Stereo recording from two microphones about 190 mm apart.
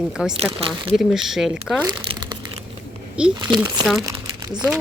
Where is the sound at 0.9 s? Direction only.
Centre (ahead or behind).